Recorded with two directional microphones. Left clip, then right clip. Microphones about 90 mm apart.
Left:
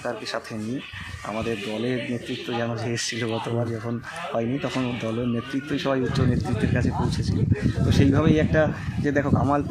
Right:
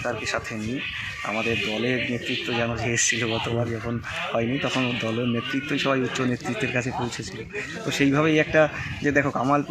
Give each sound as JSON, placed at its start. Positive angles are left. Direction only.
{"t": 1.3, "sound": "speech", "side_deg": 0}
{"t": 7.9, "sound": "speech", "side_deg": 20}